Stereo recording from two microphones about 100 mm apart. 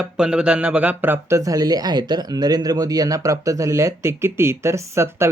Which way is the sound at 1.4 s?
35° right (ahead or behind).